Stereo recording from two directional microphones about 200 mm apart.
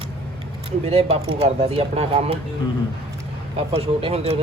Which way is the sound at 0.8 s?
30° right (ahead or behind).